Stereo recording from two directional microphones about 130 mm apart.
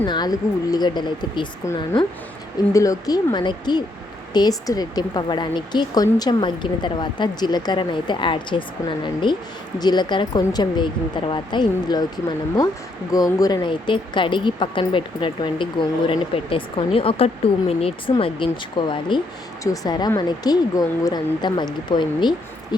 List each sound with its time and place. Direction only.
0.0 s speech: 35° left (ahead or behind)
2.7 s speech: 25° left (ahead or behind)